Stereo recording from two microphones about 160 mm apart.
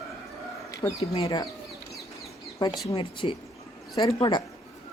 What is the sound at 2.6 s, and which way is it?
Speech, 30° left (ahead or behind).